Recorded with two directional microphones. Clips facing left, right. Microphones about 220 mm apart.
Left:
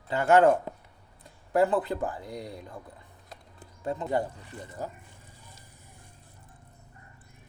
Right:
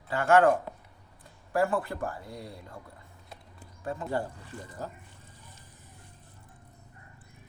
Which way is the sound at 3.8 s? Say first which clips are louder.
Left 3 dB; 20° left (ahead or behind).